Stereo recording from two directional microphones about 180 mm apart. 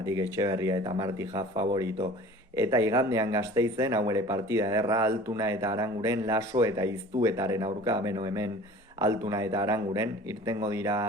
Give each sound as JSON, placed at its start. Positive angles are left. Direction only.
{"t": 0.0, "sound": "speech", "side_deg": -20}